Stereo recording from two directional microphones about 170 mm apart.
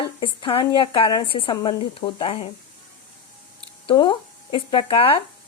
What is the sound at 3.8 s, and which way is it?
Speech, 30° left (ahead or behind).